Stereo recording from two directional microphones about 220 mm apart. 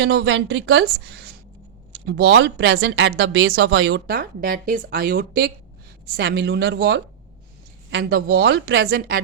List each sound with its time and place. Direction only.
0.0 s speech: 50° right (ahead or behind)